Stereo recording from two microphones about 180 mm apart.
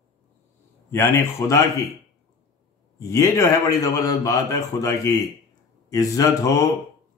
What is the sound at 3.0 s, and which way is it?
A man's voice, 20° left (ahead or behind).